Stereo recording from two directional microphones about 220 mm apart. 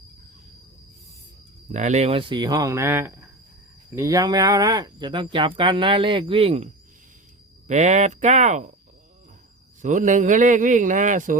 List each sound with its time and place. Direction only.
1.7 s speech: 30° right (ahead or behind)
7.7 s a man's voice: 30° right (ahead or behind)
9.8 s a man's voice: 35° right (ahead or behind)